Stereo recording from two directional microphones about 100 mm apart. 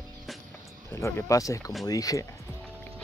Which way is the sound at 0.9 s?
25° left (ahead or behind).